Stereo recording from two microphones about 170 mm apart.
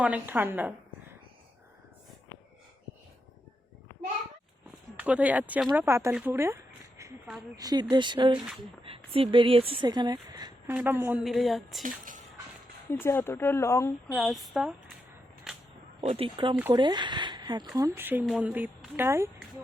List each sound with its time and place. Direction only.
0.0 s a woman's voice: 10° right (ahead or behind)
4.9 s a woman's voice: 10° right (ahead or behind)
7.0 s a sound: 15° right (ahead or behind)
7.5 s speech: 20° right (ahead or behind)
10.8 s speech: 10° right (ahead or behind)
11.8 s speech: 50° right (ahead or behind)
12.9 s speech: 15° left (ahead or behind)
14.1 s speech: centre (ahead or behind)
15.5 s a sound: centre (ahead or behind)
16.0 s a woman's voice: 35° right (ahead or behind); by 19.3 s 15° right (ahead or behind)